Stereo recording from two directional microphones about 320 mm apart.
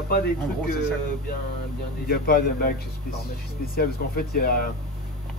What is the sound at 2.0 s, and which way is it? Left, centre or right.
Speech, left.